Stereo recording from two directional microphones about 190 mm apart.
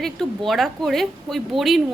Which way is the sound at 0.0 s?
Centre (ahead or behind).